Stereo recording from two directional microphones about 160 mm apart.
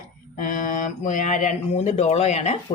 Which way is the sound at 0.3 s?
55° left (ahead or behind).